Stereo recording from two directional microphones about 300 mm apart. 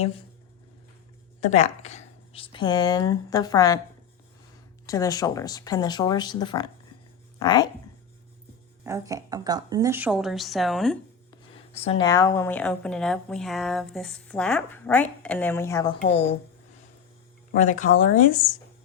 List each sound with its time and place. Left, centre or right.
1.4 s speech: left
4.9 s speech: centre
8.8 s a woman's voice: centre
11.5 s speech: centre
17.5 s speech: left